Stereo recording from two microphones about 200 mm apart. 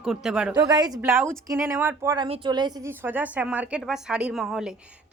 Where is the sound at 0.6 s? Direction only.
20° right (ahead or behind).